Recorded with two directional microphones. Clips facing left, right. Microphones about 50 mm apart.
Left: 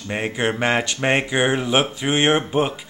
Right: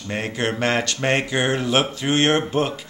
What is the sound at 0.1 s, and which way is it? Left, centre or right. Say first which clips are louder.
Speech: left 2 dB; centre.